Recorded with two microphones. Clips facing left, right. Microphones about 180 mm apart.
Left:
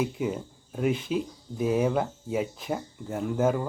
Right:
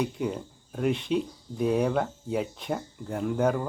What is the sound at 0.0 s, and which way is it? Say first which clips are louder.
Speech: left 1 dB; 5° left (ahead or behind).